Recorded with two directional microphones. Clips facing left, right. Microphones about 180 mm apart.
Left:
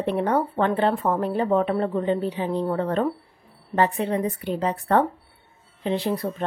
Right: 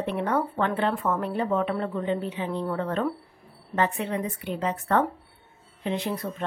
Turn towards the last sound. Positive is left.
turn(degrees=35)  # may be behind; listen again after turning